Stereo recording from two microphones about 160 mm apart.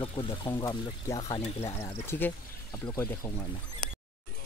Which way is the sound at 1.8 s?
15° left (ahead or behind).